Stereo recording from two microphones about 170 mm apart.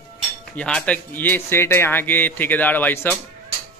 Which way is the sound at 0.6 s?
5° left (ahead or behind).